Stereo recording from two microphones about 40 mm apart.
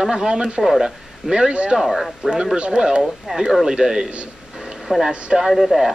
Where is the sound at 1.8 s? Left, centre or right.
Centre.